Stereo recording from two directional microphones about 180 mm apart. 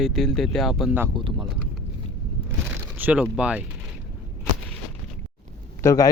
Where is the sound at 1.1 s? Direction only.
25° right (ahead or behind).